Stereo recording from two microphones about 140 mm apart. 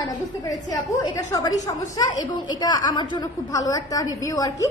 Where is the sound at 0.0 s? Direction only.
25° left (ahead or behind).